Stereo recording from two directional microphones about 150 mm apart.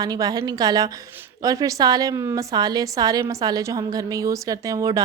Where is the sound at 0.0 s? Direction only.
25° right (ahead or behind).